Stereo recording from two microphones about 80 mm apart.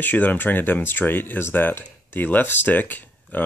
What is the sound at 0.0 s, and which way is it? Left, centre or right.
Speech, left.